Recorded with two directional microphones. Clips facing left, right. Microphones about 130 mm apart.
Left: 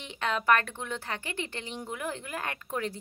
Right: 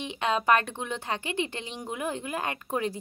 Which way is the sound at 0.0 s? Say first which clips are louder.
Right 3 dB; 20° right (ahead or behind).